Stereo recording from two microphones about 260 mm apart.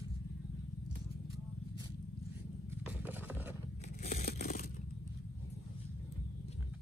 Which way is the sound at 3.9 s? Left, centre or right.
Left.